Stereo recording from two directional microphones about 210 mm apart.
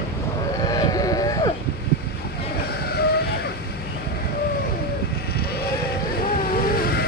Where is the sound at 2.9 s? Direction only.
50° left (ahead or behind).